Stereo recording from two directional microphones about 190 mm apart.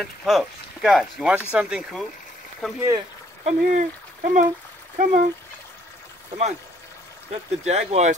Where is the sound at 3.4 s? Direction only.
40° right (ahead or behind).